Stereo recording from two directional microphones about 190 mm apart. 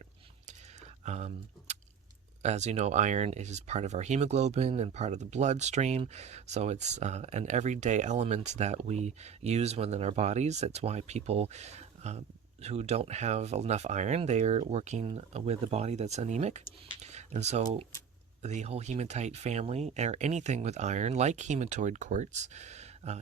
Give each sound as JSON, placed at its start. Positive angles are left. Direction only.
{"t": 1.0, "sound": "speech", "side_deg": -35}
{"t": 17.0, "sound": "a sound", "side_deg": -35}
{"t": 18.4, "sound": "speech", "side_deg": -35}